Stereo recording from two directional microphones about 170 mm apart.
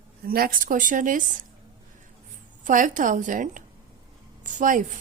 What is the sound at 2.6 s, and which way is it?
A woman's voice, 50° right (ahead or behind).